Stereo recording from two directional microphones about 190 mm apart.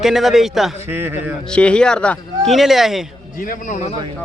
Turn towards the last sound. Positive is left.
turn(degrees=40)  # may be behind; listen again after turning